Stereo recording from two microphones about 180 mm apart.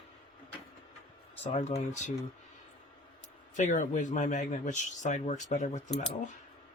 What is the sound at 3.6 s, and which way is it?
Speech, 45° left (ahead or behind).